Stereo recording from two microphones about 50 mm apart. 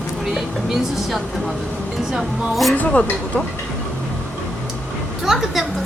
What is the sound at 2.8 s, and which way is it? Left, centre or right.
Speech, left.